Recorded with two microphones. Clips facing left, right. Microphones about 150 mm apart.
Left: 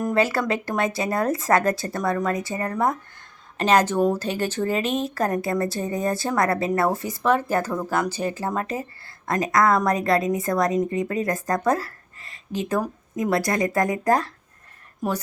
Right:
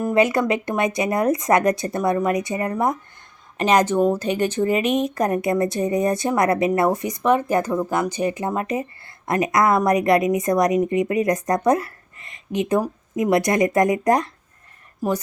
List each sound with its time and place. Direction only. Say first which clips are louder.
0.2 s a woman's voice: right 5 dB; 20° right (ahead or behind)